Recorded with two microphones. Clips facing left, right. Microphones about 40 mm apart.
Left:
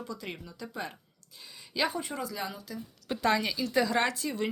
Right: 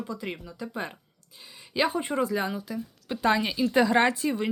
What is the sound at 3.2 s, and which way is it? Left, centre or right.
Speech, centre.